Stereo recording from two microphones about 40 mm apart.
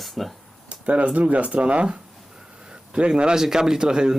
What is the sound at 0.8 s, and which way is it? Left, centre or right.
Speech, right.